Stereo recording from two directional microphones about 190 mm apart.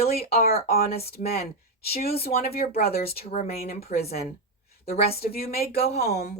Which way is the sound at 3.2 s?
35° left (ahead or behind).